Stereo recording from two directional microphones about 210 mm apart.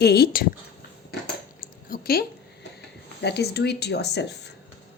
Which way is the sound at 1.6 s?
45° left (ahead or behind).